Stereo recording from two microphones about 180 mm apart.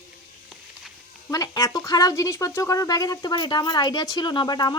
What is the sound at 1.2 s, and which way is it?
Speech, 20° left (ahead or behind).